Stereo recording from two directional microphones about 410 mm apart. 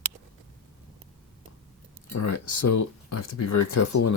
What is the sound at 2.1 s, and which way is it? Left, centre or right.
Speech, left.